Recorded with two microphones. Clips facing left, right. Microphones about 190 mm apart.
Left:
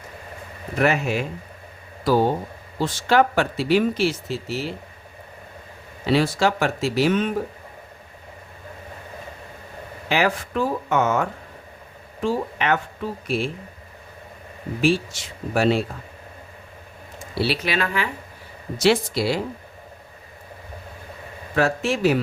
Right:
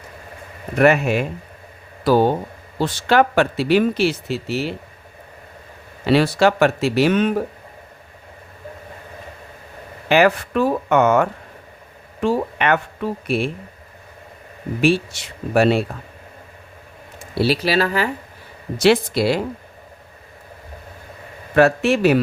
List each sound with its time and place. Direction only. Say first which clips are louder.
0.8 s speech: right 6 dB; 60° right (ahead or behind)
2.7 s speech: right 2 dB; 65° right (ahead or behind)
6.1 s speech: right 4 dB; 65° right (ahead or behind)
10.1 s speech: right 7 dB; 65° right (ahead or behind)
14.8 s speech: right 3 dB; 65° right (ahead or behind)
17.4 s speech: right 6 dB; 40° right (ahead or behind)
18.8 s speech: right 4 dB; 60° right (ahead or behind)
21.5 s speech: right 6 dB; 65° right (ahead or behind)